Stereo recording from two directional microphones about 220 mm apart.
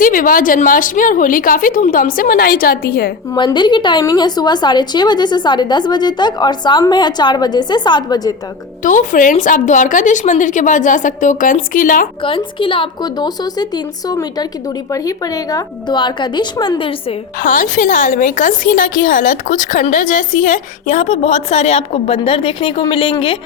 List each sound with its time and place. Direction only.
0.0 s a woman's voice: 40° left (ahead or behind)
3.3 s speech: 20° left (ahead or behind)
8.8 s a woman's voice: 35° left (ahead or behind)
12.2 s speech: 25° left (ahead or behind)
17.4 s a woman's voice: 35° left (ahead or behind)